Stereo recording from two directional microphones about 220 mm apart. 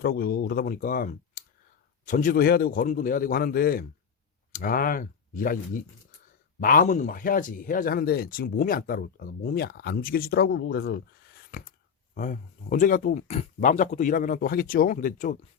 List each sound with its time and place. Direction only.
0.0 s speech: 45° left (ahead or behind)
12.1 s speech: 35° left (ahead or behind)